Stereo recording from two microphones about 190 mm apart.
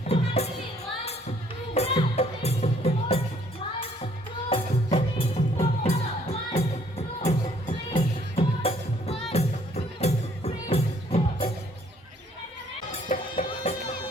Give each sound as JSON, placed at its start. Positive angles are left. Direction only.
{"t": 0.1, "sound": "music", "side_deg": 35}
{"t": 1.7, "sound": "music", "side_deg": 35}
{"t": 13.1, "sound": "music", "side_deg": 40}